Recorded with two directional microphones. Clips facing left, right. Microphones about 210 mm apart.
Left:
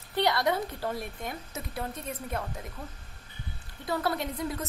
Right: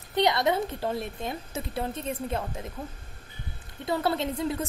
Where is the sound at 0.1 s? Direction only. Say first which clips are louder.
Right 3 dB; 20° right (ahead or behind).